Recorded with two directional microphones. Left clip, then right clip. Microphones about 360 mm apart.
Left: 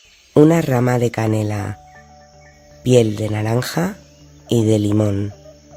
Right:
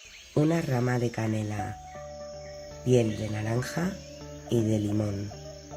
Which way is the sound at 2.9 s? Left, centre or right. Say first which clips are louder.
Left 11 dB; left.